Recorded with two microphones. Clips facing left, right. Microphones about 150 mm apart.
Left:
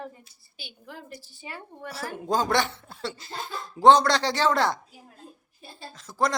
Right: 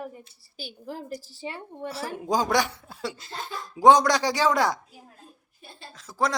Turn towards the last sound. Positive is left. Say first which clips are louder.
# even
turn(degrees=-5)  # may be behind; listen again after turning